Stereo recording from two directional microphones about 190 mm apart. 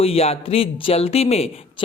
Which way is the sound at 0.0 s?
30° left (ahead or behind).